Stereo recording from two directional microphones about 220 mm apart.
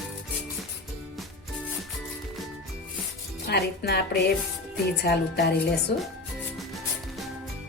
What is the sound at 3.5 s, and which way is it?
A woman's voice, 50° left (ahead or behind).